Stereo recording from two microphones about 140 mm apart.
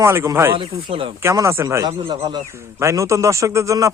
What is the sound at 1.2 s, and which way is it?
A man's voice, 20° right (ahead or behind).